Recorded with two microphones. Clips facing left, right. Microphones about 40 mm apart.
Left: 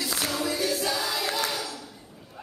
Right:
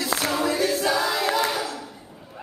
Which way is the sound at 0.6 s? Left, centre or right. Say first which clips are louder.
Right 5 dB; centre.